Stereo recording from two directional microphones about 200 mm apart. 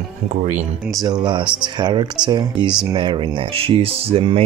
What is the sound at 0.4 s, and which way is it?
Speech, 35° right (ahead or behind).